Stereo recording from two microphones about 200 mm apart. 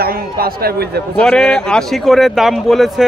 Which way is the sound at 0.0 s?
50° right (ahead or behind).